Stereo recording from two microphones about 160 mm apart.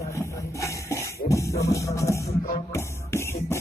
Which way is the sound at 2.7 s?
15° left (ahead or behind).